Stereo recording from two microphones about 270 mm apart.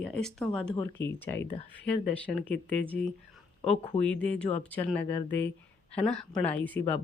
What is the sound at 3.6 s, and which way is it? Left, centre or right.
Speech, left.